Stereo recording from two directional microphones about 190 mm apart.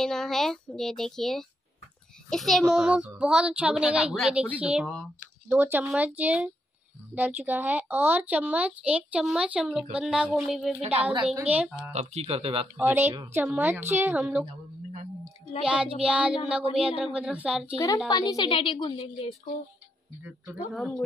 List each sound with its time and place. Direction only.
0.0 s a child's voice: centre (ahead or behind)
10.8 s speech: 30° right (ahead or behind)
11.2 s speech: 10° right (ahead or behind)
11.9 s speech: 35° right (ahead or behind)
12.8 s speech: 10° right (ahead or behind)
15.6 s a child's voice: 5° right (ahead or behind)
17.7 s a woman's voice: 20° left (ahead or behind)